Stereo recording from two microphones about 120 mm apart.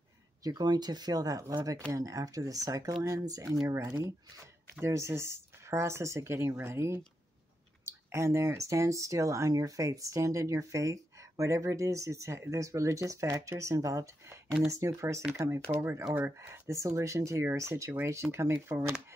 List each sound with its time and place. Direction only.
0.4 s speech: 35° right (ahead or behind)